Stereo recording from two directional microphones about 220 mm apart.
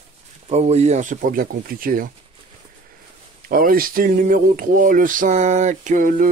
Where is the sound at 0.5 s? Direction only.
30° right (ahead or behind).